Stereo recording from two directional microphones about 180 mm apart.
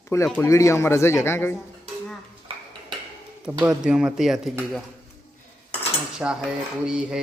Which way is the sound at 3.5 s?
5° right (ahead or behind).